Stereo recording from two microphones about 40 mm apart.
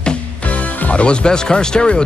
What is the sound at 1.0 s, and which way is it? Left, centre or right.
Speech, left.